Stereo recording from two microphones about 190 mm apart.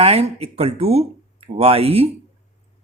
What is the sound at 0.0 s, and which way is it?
A woman's voice, 30° right (ahead or behind).